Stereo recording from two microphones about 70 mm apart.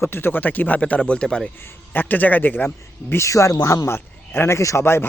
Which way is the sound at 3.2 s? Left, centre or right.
Left.